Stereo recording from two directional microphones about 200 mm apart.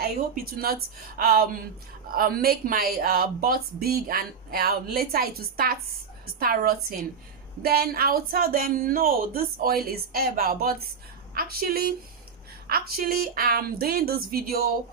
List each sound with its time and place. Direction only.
0.5 s speech: 50° right (ahead or behind)